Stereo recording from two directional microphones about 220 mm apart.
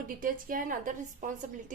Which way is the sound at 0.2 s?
40° right (ahead or behind).